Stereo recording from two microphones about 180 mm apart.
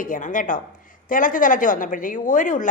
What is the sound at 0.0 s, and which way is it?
A woman's voice, 45° left (ahead or behind).